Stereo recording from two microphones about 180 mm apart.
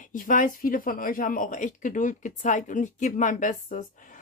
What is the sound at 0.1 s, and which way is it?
Speech, 45° left (ahead or behind).